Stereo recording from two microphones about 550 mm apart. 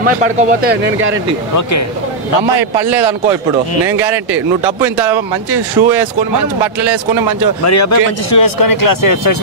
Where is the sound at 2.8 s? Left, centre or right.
Right.